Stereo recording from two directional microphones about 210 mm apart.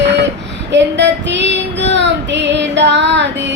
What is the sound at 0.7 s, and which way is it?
Female singing, 55° right (ahead or behind).